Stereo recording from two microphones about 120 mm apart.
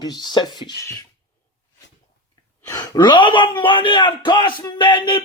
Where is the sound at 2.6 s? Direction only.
30° left (ahead or behind).